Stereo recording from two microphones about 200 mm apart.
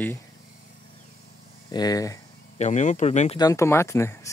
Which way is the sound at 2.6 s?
35° left (ahead or behind).